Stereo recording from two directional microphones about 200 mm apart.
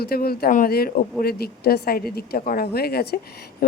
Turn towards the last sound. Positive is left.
turn(degrees=50)  # may be behind; listen again after turning